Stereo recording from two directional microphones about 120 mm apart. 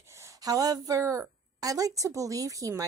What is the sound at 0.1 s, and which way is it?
Speech, 25° right (ahead or behind).